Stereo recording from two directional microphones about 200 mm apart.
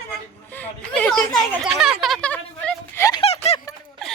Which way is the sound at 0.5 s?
5° left (ahead or behind).